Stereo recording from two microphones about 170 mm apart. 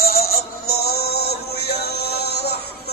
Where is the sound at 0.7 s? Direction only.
65° left (ahead or behind).